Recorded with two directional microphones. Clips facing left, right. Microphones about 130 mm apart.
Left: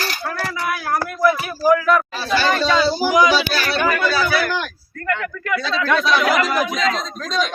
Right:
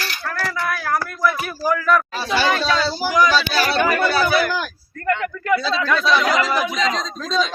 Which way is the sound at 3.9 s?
25° right (ahead or behind).